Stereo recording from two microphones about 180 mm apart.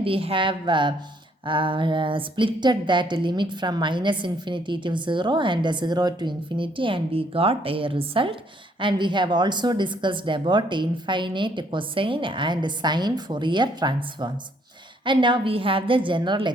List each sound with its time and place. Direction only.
0.0 s a woman's voice: 30° right (ahead or behind)